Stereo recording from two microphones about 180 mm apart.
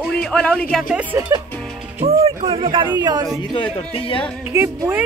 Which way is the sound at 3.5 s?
30° left (ahead or behind).